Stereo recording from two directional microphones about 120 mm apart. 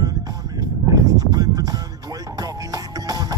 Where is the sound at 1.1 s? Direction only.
30° right (ahead or behind).